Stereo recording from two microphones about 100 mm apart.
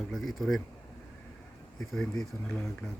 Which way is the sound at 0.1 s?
Centre (ahead or behind).